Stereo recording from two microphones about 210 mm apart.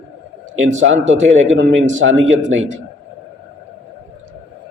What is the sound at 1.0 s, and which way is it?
A man's voice, 60° right (ahead or behind).